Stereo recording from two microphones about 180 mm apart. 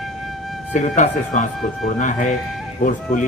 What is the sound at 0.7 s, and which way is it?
A man's voice, 45° left (ahead or behind).